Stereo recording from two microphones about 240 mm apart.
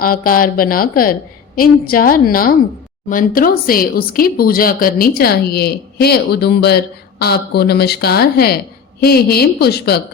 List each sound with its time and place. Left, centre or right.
0.0 s speech: left